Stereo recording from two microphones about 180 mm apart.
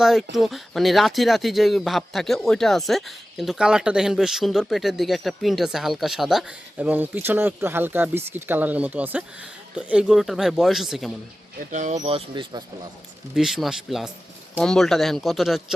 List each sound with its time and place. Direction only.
0.0 s speech: centre (ahead or behind)
11.7 s speech: 40° right (ahead or behind)
11.9 s speech: 30° right (ahead or behind)
13.3 s speech: centre (ahead or behind)